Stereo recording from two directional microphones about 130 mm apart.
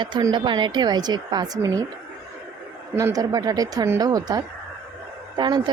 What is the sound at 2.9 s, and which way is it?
Speech, 25° right (ahead or behind).